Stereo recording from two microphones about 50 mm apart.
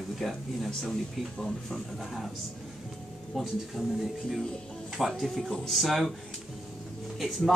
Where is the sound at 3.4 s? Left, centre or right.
Centre.